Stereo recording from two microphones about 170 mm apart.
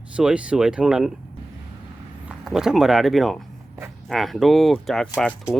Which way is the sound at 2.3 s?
5° right (ahead or behind).